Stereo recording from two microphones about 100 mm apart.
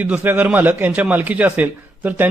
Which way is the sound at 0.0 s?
15° right (ahead or behind).